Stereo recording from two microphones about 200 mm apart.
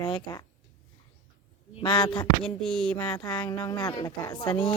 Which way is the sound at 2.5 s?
5° left (ahead or behind).